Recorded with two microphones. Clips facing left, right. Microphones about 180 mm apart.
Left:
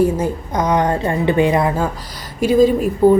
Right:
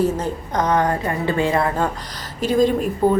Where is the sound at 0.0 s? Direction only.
10° left (ahead or behind).